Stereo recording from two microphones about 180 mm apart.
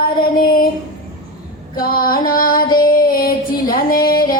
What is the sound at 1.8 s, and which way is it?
Music, 55° left (ahead or behind).